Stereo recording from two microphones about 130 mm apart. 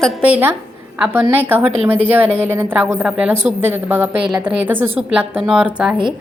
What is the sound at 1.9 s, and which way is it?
A woman's voice, 15° right (ahead or behind).